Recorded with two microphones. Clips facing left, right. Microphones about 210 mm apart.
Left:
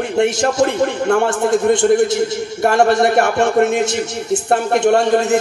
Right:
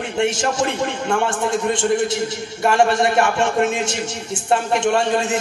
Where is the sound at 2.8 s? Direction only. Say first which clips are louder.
Left 4 dB; 60° left (ahead or behind).